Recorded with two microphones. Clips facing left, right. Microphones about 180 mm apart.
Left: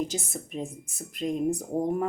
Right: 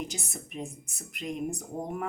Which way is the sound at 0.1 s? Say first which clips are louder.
Left 6 dB; 30° left (ahead or behind).